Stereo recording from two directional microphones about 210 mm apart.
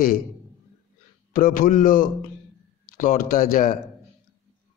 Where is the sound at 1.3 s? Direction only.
40° left (ahead or behind).